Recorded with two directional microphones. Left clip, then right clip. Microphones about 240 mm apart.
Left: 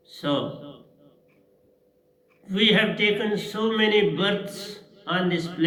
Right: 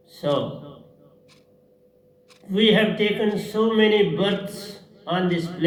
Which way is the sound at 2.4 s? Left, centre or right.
Left.